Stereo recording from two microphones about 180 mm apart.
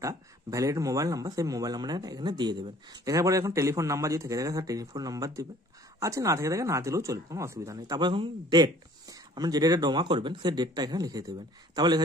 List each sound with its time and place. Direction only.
0.0 s speech: 20° right (ahead or behind)